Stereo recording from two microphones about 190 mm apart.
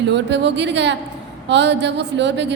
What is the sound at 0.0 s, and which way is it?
A woman's voice, 65° right (ahead or behind).